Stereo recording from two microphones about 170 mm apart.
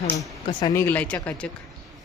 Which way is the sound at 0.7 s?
15° left (ahead or behind).